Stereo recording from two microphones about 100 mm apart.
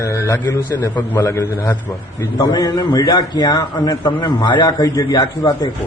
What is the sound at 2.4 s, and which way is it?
A man's voice, 45° left (ahead or behind).